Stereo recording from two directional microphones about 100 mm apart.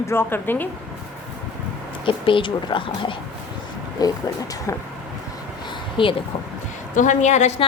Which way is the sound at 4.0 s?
40° left (ahead or behind).